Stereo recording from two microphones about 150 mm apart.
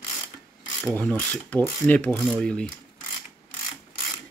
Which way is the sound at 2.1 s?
Centre (ahead or behind).